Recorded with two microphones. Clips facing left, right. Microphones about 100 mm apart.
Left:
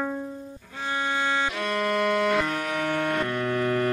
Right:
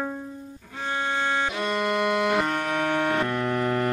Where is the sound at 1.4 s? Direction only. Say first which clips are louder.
Right 1 dB; 15° right (ahead or behind).